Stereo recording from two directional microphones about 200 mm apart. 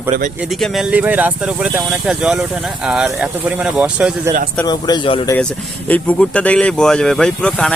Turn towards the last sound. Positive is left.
turn(degrees=5)  # may be behind; listen again after turning